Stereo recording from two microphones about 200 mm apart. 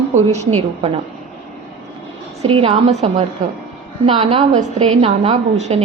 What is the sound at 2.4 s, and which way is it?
A woman's voice, 25° right (ahead or behind).